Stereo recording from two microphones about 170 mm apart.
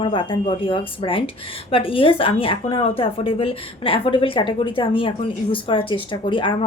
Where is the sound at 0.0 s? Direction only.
30° left (ahead or behind).